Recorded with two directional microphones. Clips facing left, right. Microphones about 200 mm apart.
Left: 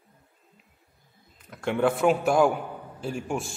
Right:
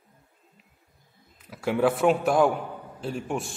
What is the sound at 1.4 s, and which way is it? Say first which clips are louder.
A man's voice: right 1 dB; 5° right (ahead or behind).